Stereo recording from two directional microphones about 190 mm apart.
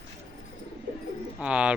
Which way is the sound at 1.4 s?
5° right (ahead or behind).